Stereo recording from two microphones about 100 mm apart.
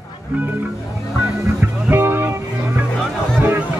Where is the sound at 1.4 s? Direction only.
20° right (ahead or behind).